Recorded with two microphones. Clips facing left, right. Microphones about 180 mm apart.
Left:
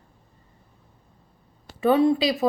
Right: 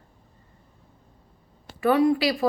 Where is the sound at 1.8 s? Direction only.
25° left (ahead or behind).